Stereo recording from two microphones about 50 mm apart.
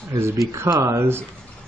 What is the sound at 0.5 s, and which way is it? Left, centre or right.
Speech, right.